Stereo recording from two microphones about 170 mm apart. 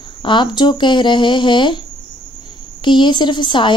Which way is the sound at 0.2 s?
30° left (ahead or behind).